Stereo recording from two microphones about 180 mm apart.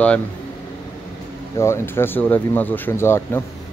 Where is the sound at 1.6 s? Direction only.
15° left (ahead or behind).